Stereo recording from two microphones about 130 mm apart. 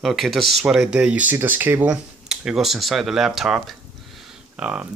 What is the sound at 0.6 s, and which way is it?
Speech, 5° right (ahead or behind).